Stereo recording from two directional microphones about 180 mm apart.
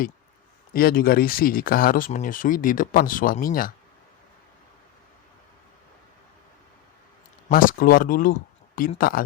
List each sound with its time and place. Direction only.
0.7 s speech: 55° left (ahead or behind)
7.4 s speech: 50° left (ahead or behind)